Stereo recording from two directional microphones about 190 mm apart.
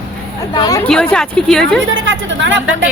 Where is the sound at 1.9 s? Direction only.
85° right.